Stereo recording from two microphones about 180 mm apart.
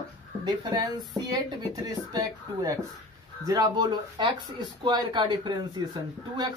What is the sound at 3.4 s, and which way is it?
Speech, 20° right (ahead or behind).